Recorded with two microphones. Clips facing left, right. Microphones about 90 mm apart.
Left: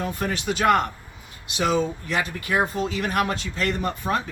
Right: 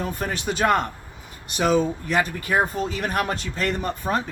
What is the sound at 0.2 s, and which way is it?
Speech, 40° right (ahead or behind).